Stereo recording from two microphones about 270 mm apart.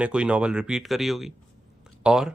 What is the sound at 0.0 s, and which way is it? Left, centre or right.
Speech, centre.